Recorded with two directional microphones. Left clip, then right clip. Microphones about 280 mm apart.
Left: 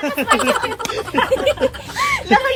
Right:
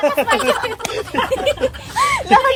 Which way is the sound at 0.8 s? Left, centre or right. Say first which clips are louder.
Even; right.